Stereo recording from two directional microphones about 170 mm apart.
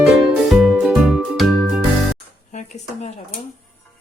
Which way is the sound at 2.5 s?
45° left (ahead or behind).